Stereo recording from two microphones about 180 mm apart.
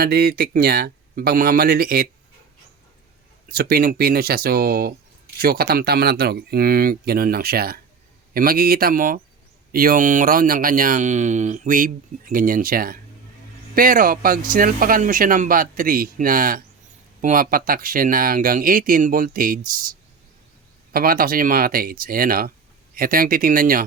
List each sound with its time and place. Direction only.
0.0 s speech: 55° right (ahead or behind)
3.5 s speech: 55° right (ahead or behind)
20.9 s speech: 55° right (ahead or behind)